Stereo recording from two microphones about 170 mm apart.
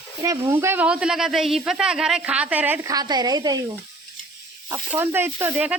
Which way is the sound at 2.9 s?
25° right (ahead or behind).